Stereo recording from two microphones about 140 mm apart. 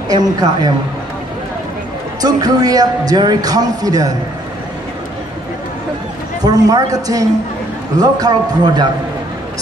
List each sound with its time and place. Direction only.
0.1 s a man's voice: 25° right (ahead or behind)
2.2 s a man's voice: 25° right (ahead or behind)
6.4 s a man's voice: 25° right (ahead or behind)